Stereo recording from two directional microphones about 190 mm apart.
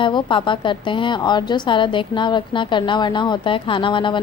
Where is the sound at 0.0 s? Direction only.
25° left (ahead or behind).